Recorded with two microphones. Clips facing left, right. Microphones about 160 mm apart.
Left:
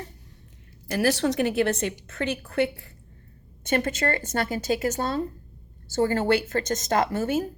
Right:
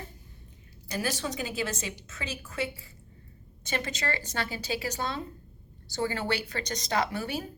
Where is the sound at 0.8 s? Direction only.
70° left (ahead or behind).